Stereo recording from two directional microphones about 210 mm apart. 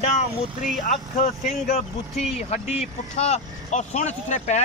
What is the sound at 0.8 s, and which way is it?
Speech, 35° left (ahead or behind).